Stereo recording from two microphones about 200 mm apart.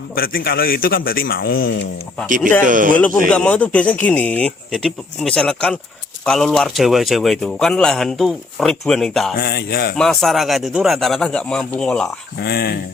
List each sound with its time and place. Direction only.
0.2 s a man's voice: 50° left (ahead or behind)
2.6 s speech: 40° right (ahead or behind)
2.9 s a man's voice: 5° left (ahead or behind)
9.4 s a man's voice: 50° left (ahead or behind)
10.0 s a man's voice: centre (ahead or behind)
12.4 s a man's voice: 50° left (ahead or behind)